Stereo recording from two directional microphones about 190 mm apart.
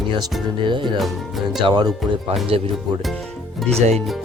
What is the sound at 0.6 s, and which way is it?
Speech, 25° right (ahead or behind).